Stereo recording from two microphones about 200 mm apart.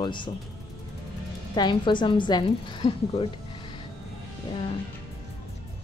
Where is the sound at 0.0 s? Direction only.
25° left (ahead or behind).